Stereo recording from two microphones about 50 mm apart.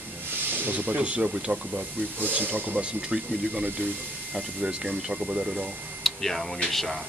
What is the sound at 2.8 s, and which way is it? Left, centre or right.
Speech, right.